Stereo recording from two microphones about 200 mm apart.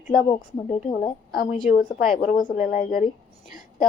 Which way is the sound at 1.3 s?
45° left (ahead or behind).